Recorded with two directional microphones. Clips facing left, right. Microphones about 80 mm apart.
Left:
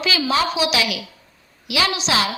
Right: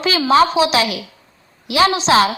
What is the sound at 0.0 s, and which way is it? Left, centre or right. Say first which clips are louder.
A woman's voice: right 7 dB; right.